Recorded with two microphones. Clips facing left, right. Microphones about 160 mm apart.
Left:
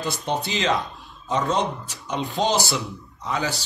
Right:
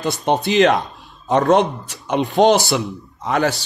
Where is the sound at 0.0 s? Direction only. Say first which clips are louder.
Right 7 dB; 70° right (ahead or behind).